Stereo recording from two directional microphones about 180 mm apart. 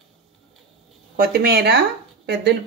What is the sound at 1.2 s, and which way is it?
Speech, 60° right (ahead or behind).